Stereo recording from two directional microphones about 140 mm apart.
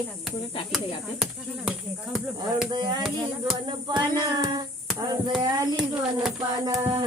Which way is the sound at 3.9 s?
30° right (ahead or behind).